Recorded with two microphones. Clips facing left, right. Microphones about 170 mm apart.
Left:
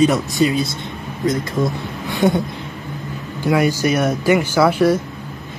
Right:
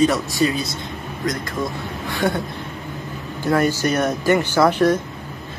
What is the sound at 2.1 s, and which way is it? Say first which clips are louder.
Speech: left 5 dB; 20° left (ahead or behind).